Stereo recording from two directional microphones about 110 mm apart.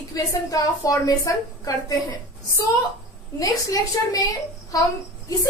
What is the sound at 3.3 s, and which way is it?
Speech, 30° left (ahead or behind).